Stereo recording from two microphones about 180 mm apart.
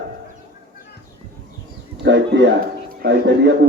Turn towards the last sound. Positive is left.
turn(degrees=-80)